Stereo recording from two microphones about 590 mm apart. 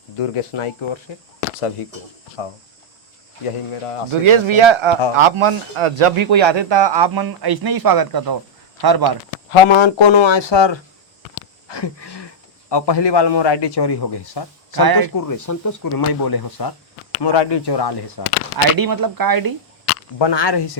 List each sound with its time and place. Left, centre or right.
0.2 s speech: left
3.4 s speech: left
4.1 s a man's voice: right
9.5 s speech: left
14.8 s speech: right
15.1 s speech: left
18.8 s speech: right
20.1 s speech: left